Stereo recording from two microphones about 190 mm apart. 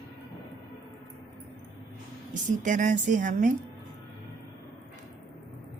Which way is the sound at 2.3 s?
40° right (ahead or behind).